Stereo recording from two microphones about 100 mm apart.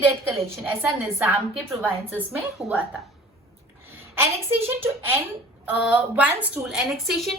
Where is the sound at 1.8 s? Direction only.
15° right (ahead or behind).